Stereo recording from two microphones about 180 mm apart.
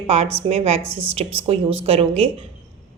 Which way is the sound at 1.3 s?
30° right (ahead or behind).